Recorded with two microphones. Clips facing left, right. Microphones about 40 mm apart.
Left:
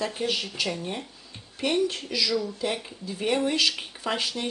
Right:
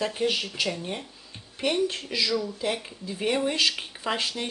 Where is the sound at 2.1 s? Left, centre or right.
Centre.